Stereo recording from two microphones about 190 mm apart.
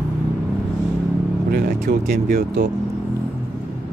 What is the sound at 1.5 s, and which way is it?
Speech, 55° right (ahead or behind).